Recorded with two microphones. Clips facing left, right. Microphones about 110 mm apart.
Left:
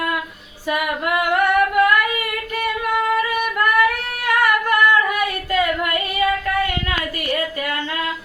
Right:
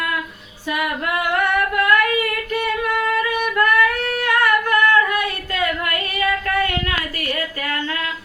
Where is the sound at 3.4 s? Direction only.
10° left (ahead or behind).